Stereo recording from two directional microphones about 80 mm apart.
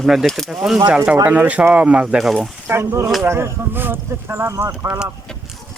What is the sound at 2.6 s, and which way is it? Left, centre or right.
Speech, right.